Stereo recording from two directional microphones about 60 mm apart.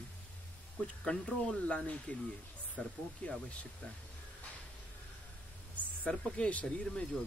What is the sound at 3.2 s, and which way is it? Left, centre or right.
Speech, left.